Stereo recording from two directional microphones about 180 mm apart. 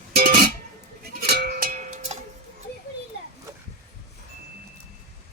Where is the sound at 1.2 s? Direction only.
65° right (ahead or behind); by 2.2 s 45° right (ahead or behind).